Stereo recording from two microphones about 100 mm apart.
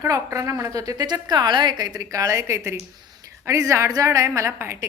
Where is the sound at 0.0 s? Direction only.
30° right (ahead or behind).